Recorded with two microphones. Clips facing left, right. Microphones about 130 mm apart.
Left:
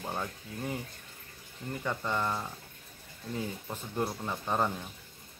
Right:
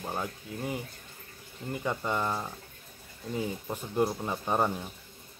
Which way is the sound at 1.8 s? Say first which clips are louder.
Right 2 dB; 15° right (ahead or behind).